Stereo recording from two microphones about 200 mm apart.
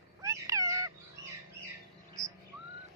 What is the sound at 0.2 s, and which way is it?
Cat, 15° right (ahead or behind).